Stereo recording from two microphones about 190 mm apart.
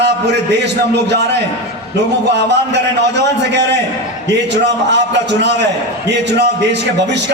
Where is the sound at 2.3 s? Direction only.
65° right (ahead or behind).